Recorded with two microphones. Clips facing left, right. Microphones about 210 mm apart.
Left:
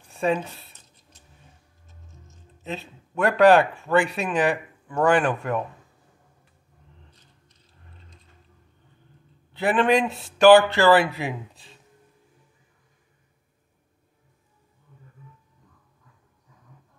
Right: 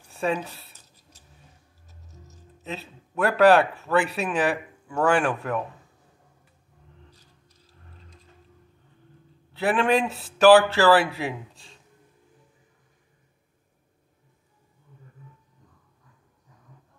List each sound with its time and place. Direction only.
0.1 s a sound: centre (ahead or behind)
2.1 s music: 40° right (ahead or behind)
2.6 s speech: centre (ahead or behind)
9.5 s speech: centre (ahead or behind)